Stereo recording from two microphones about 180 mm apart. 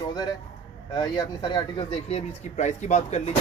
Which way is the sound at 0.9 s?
25° left (ahead or behind).